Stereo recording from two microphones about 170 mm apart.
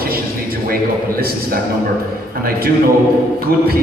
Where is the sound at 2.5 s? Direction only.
60° right (ahead or behind).